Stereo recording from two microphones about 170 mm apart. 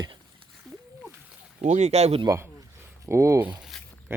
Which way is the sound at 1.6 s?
40° right (ahead or behind).